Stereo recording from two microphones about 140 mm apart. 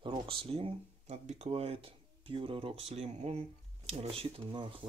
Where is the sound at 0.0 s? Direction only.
35° right (ahead or behind).